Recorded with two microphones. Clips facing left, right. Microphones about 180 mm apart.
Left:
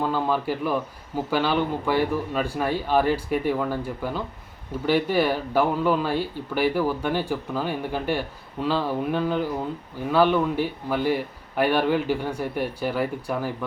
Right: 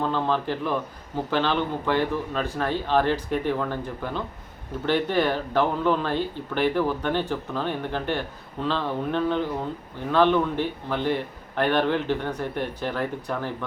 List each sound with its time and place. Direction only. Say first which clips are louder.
0.0 s a man's voice: left 1 dB; 10° left (ahead or behind)